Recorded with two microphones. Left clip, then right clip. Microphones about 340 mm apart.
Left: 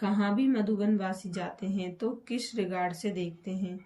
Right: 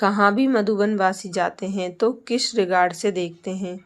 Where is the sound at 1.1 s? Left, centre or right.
Centre.